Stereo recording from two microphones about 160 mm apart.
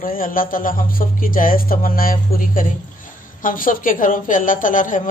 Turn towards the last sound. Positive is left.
turn(degrees=55)  # may be behind; listen again after turning